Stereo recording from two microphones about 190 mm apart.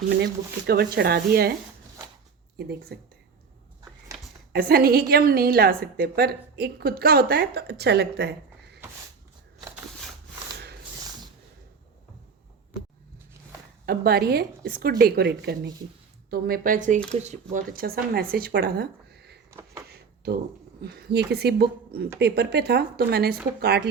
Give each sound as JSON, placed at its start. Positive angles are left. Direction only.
{"t": 0.7, "sound": "a woman's voice", "side_deg": -55}
{"t": 2.9, "sound": "a woman's voice", "side_deg": -55}
{"t": 4.5, "sound": "a woman's voice", "side_deg": -55}
{"t": 13.8, "sound": "a woman's voice", "side_deg": -55}
{"t": 16.3, "sound": "speech", "side_deg": -50}
{"t": 19.9, "sound": "a sound", "side_deg": -55}
{"t": 20.8, "sound": "a woman's voice", "side_deg": -60}